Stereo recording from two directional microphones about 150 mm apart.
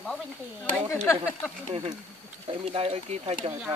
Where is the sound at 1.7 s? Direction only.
40° right (ahead or behind).